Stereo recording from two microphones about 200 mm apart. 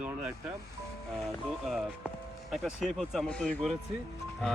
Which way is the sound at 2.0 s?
Centre (ahead or behind).